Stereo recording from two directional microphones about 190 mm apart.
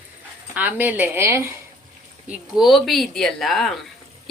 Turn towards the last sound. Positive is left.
turn(degrees=0)  # may be behind; listen again after turning